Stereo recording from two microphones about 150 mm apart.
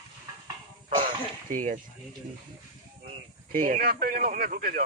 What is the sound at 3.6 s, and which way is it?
Speech, 70° right (ahead or behind).